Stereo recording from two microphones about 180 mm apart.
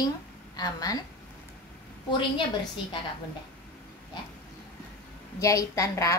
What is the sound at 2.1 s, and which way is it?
Speech, 25° left (ahead or behind).